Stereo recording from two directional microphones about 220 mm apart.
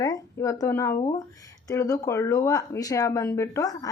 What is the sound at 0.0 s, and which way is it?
Speech, 15° left (ahead or behind).